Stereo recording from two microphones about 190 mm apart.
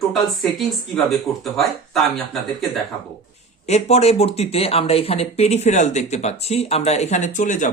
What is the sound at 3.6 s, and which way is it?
Speech, 35° left (ahead or behind).